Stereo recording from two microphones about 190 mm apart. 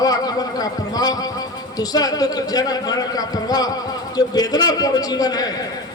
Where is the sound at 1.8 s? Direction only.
20° left (ahead or behind).